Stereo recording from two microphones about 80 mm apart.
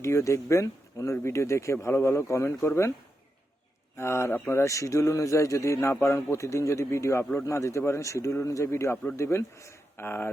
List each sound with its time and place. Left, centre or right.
0.0 s speech: left
3.9 s speech: left